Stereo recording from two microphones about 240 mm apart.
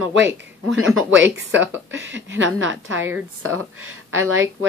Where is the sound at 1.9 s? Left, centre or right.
Right.